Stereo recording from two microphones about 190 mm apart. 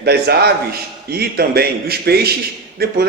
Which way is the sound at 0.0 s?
60° right (ahead or behind).